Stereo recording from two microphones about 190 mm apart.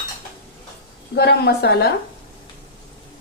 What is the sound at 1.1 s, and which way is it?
Speech, 60° left (ahead or behind).